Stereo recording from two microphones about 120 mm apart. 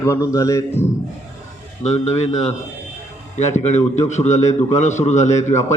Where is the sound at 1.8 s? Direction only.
65° left (ahead or behind).